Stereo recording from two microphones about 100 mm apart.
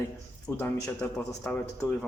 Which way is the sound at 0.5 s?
20° left (ahead or behind).